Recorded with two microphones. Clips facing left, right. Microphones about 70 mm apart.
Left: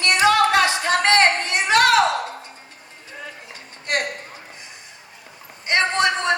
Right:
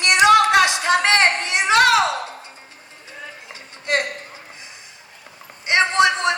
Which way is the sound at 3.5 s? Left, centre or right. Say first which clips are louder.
Right 3 dB; right.